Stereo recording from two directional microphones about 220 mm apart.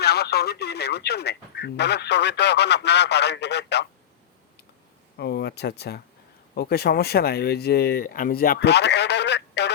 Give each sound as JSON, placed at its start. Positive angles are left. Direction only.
{"t": 0.0, "sound": "speech", "side_deg": 45}
{"t": 5.1, "sound": "speech", "side_deg": 50}